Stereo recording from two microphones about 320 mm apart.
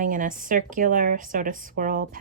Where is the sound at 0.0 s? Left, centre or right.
Right.